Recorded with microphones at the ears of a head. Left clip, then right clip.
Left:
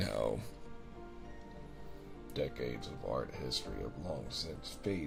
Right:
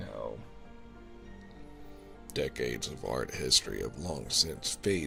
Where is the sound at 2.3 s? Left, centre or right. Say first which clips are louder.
Right 5 dB; right.